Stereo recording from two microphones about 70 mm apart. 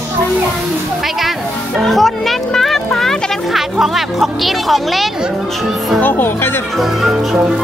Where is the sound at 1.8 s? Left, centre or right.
Centre.